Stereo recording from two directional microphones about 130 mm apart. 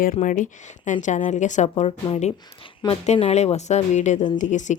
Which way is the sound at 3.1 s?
55° left (ahead or behind).